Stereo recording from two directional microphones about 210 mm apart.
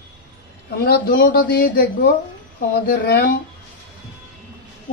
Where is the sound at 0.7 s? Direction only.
50° left (ahead or behind).